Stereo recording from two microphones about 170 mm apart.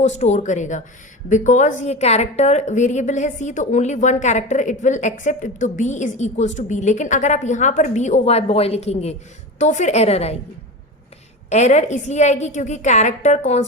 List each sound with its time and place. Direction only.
0.0 s a woman's voice: 45° left (ahead or behind)
11.4 s a woman's voice: 40° left (ahead or behind)